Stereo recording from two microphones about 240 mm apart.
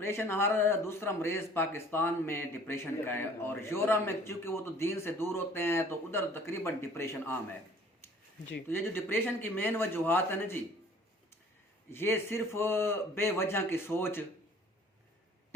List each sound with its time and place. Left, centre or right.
0.0 s speech: centre
8.6 s speech: centre
11.9 s speech: centre